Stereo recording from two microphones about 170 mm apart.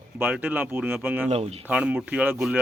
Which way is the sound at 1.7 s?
5° right (ahead or behind).